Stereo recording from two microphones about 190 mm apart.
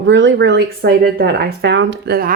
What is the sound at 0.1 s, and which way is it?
Speech, 75° right (ahead or behind).